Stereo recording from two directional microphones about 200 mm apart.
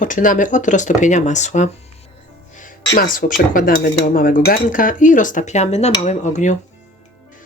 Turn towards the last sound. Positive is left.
turn(degrees=35)  # may be behind; listen again after turning